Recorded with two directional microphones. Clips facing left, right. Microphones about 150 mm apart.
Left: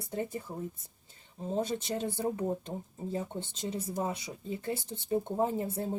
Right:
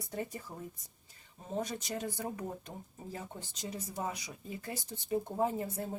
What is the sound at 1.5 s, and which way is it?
Speech, 25° left (ahead or behind).